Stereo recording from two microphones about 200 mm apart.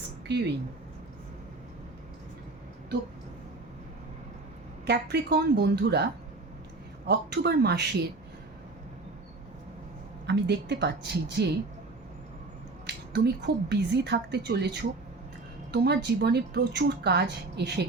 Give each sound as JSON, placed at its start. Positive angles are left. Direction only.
{"t": 0.3, "sound": "speech", "side_deg": -60}
{"t": 4.9, "sound": "speech", "side_deg": -55}
{"t": 7.1, "sound": "speech", "side_deg": -55}
{"t": 10.2, "sound": "speech", "side_deg": -60}
{"t": 12.8, "sound": "speech", "side_deg": -55}